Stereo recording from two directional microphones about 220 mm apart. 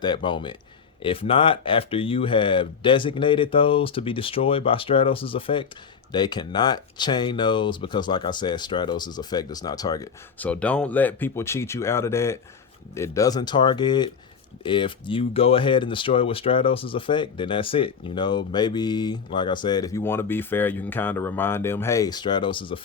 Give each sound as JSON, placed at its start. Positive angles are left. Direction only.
{"t": 0.0, "sound": "speech", "side_deg": 20}